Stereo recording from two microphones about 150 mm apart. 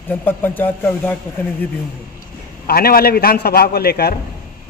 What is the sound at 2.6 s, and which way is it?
A man's voice, 85° left.